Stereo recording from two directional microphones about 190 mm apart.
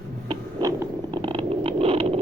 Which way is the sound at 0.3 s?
20° right (ahead or behind).